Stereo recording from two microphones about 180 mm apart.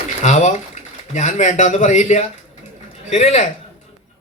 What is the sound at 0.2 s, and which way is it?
A man's voice, 40° left (ahead or behind).